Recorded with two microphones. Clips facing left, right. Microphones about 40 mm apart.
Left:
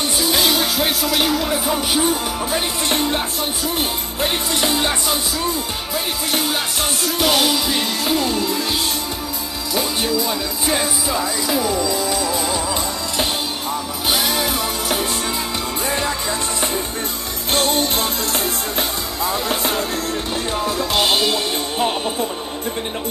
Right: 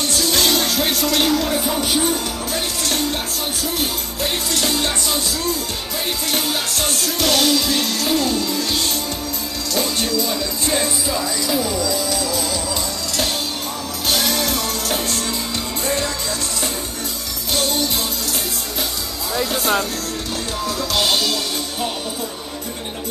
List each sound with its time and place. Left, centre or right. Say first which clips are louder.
0.0 s music: left 1 dB; centre
2.5 s music: left 2 dB; left
6.3 s music: left 2 dB; centre
9.8 s music: left 1 dB; centre
14.1 s music: even; centre
17.5 s music: left 3 dB; left
20.6 s music: left 1 dB; centre